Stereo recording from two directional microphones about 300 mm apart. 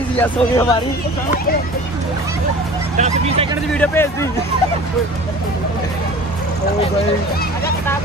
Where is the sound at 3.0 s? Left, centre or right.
Right.